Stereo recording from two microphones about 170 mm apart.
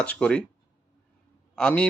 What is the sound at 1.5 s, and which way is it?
Speech, 5° left (ahead or behind).